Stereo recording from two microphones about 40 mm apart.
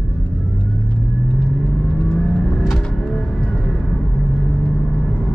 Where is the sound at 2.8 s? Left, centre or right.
Centre.